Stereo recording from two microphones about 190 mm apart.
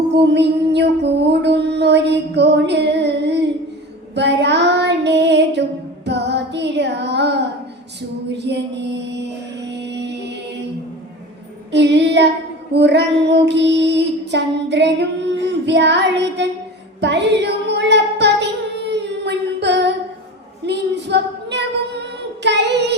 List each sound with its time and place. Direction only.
0.1 s music: 65° right (ahead or behind)
4.1 s child singing: 65° right (ahead or behind)
8.3 s mantra: 65° right (ahead or behind)
11.7 s child singing: 65° right (ahead or behind)
17.0 s female singing: 65° right (ahead or behind)
22.4 s child singing: 65° right (ahead or behind)